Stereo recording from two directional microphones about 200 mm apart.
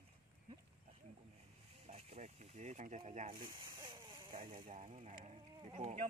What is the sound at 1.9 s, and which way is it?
Speech, 30° right (ahead or behind).